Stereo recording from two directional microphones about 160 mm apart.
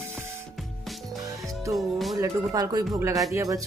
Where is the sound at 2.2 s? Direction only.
25° right (ahead or behind).